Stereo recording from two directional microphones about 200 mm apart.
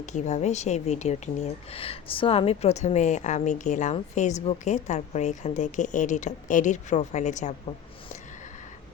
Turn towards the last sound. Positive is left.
turn(degrees=35)  # may be behind; listen again after turning